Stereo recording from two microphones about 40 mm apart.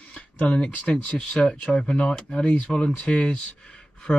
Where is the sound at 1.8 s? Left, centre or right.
Left.